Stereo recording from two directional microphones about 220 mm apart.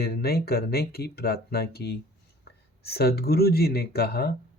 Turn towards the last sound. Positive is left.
turn(degrees=45)  # may be behind; listen again after turning